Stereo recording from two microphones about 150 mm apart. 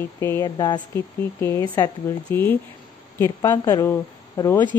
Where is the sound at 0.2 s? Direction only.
20° left (ahead or behind).